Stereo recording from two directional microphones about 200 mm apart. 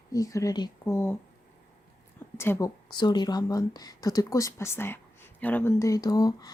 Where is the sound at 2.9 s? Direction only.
20° left (ahead or behind).